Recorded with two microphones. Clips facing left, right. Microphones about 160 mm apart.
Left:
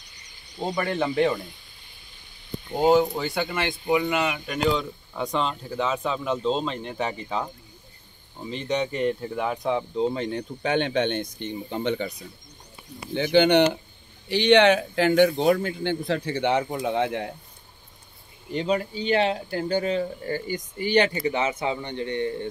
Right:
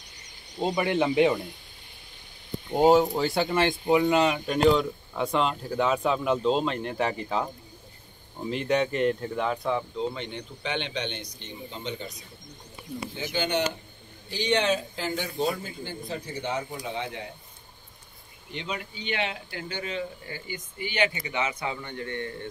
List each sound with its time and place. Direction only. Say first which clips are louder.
0.6 s speech: right 1 dB; 15° right (ahead or behind)
2.9 s speech: left 1 dB; centre (ahead or behind)
3.2 s speech: right 2 dB; 35° right (ahead or behind)
4.7 s speech: right 2 dB; 5° right (ahead or behind); by 9.8 s 15° left (ahead or behind)
9.9 s speech: left 6 dB; 40° left (ahead or behind); by 17.3 s 60° left (ahead or behind)
18.5 s speech: left 10 dB; 40° left (ahead or behind); by 22.3 s 20° left (ahead or behind)